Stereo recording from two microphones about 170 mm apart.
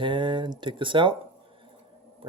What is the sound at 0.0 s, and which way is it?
Speech, 30° right (ahead or behind).